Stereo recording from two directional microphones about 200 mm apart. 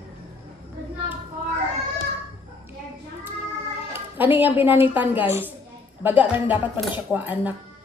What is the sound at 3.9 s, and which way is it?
Cat, 10° right (ahead or behind).